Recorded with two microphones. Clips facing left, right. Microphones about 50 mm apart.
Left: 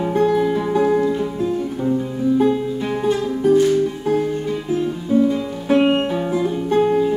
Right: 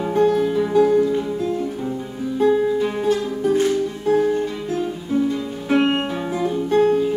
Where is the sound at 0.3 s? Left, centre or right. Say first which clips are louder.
Left 1 dB; centre.